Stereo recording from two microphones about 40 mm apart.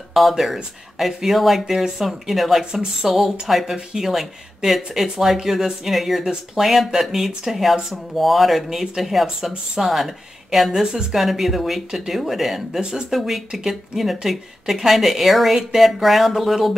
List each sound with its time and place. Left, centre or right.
0.1 s a woman's voice: centre
2.6 s a woman's voice: right
3.1 s a woman's voice: centre
10.7 s speech: centre
11.1 s a woman's voice: centre